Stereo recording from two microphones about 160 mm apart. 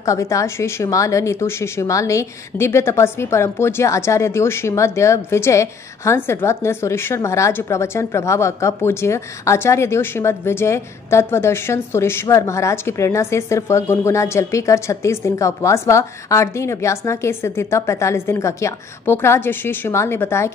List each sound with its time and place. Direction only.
0.0 s a woman's voice: 20° left (ahead or behind)